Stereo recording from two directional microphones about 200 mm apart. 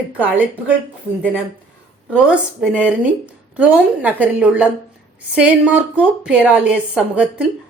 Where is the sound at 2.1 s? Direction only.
5° right (ahead or behind).